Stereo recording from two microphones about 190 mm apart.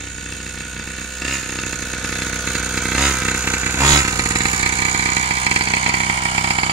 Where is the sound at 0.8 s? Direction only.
Centre (ahead or behind).